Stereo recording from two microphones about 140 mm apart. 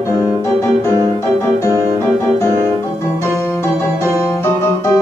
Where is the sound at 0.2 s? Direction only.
20° left (ahead or behind).